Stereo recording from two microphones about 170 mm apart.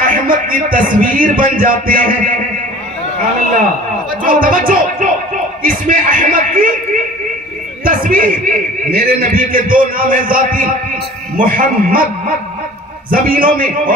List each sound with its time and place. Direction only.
0.0 s a man's voice: 55° right (ahead or behind)
4.2 s speech: 55° right (ahead or behind)
7.8 s a man's voice: 55° right (ahead or behind)
13.1 s a man's voice: 55° right (ahead or behind)